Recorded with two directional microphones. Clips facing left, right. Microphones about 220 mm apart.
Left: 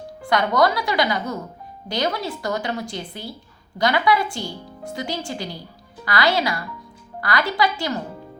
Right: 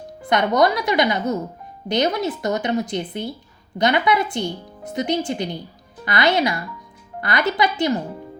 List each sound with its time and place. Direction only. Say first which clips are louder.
0.2 s a woman's voice: right 2 dB; 20° right (ahead or behind)